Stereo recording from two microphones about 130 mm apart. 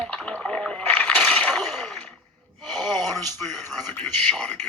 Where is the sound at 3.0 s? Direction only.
20° left (ahead or behind).